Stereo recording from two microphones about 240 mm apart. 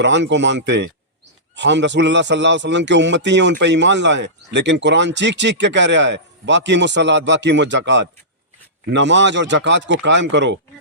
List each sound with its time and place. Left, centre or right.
0.0 s a man's voice: right